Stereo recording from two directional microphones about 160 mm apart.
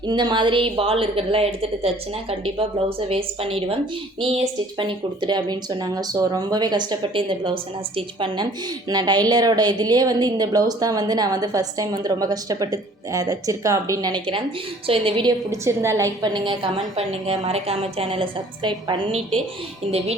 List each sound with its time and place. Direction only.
0.1 s a woman's voice: 30° right (ahead or behind)
3.1 s a woman's voice: 35° right (ahead or behind)
4.8 s a woman's voice: 30° right (ahead or behind)
15.6 s a woman's voice: 15° right (ahead or behind)